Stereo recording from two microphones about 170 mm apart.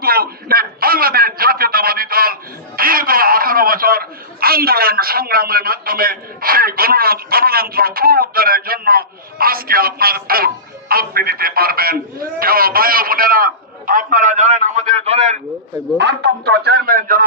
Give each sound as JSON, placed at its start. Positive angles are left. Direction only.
{"t": 0.0, "sound": "a man's voice", "side_deg": -60}
{"t": 16.0, "sound": "speech", "side_deg": -85}